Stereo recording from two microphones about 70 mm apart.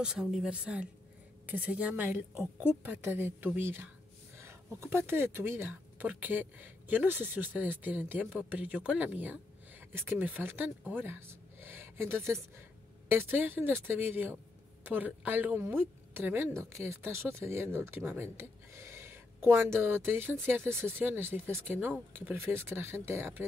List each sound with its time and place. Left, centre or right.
0.0 s speech: centre; by 23.4 s right